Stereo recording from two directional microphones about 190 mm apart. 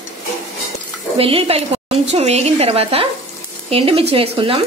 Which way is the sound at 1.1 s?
30° right (ahead or behind).